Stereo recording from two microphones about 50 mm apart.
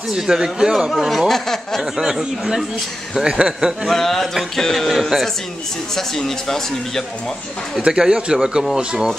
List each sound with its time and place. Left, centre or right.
0.1 s a man's voice: centre
1.8 s a man's voice: centre
3.8 s a man's voice: centre
7.8 s a man's voice: centre